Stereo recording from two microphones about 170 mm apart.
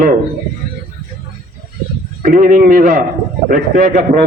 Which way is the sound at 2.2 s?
55° right (ahead or behind).